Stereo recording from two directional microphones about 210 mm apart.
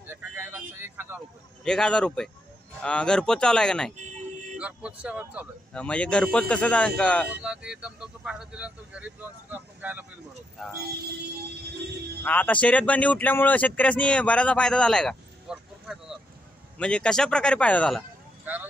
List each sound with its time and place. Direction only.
0.0 s vehicle: 10° right (ahead or behind)
1.6 s speech: 5° left (ahead or behind)
5.7 s speech: 5° left (ahead or behind)
12.2 s speech: 10° left (ahead or behind)
18.4 s speech: 10° right (ahead or behind)